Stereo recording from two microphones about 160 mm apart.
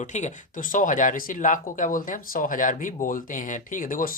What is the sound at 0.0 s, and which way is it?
Speech, 50° left (ahead or behind).